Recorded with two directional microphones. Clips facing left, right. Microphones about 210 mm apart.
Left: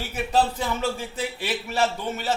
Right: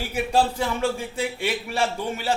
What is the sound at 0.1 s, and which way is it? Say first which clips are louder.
A man's voice: right 1 dB; 10° right (ahead or behind).